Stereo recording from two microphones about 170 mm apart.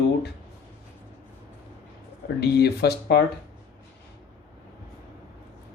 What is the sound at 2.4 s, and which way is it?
Speech, 70° left (ahead or behind).